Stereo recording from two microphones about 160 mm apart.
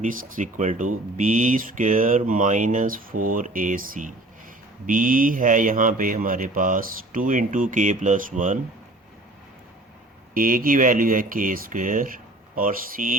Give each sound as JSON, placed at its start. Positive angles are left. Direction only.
{"t": 0.0, "sound": "speech", "side_deg": -55}
{"t": 10.3, "sound": "speech", "side_deg": -60}